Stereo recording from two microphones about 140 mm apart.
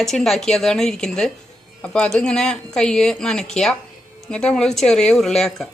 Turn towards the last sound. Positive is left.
turn(degrees=5)  # may be behind; listen again after turning